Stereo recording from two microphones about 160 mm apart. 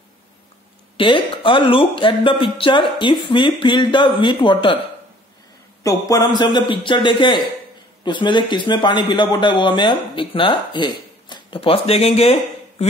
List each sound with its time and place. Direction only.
0.9 s speech: 30° left (ahead or behind)
5.9 s speech: 20° left (ahead or behind); by 12.8 s 40° left (ahead or behind)